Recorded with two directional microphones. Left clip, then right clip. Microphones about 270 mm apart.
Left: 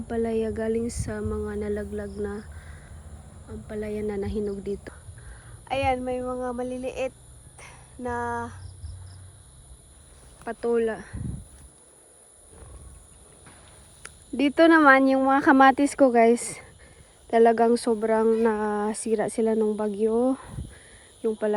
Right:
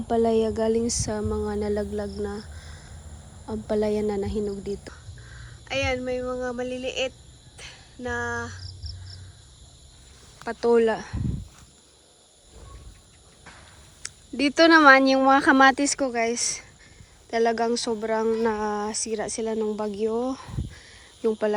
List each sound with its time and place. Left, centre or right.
0.1 s a sound: centre
3.7 s speech: centre
5.6 s speech: centre
7.5 s cricket: left
10.4 s a sound: centre
14.0 s speech: centre